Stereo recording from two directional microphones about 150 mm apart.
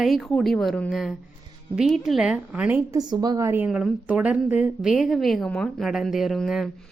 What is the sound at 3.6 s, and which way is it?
A woman's voice, 5° right (ahead or behind).